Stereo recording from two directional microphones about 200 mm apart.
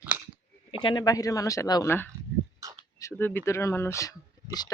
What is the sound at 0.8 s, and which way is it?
Speech, 20° left (ahead or behind).